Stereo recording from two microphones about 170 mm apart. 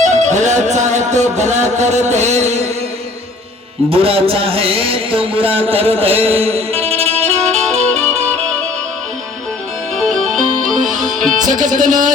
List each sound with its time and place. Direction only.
0.0 s music: 45° right (ahead or behind)
3.8 s speech: 35° right (ahead or behind)
8.0 s music: 15° right (ahead or behind)
10.1 s music: centre (ahead or behind)
10.9 s music: 50° right (ahead or behind)